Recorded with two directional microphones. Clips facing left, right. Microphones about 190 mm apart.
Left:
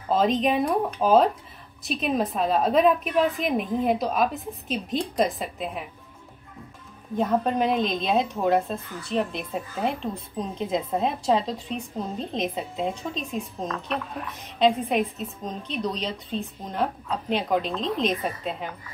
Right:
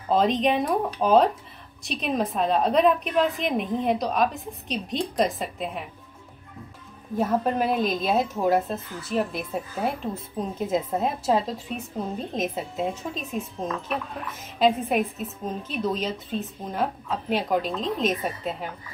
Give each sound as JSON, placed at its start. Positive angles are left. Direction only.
{"t": 0.1, "sound": "speech", "side_deg": 0}
{"t": 7.2, "sound": "speech", "side_deg": -5}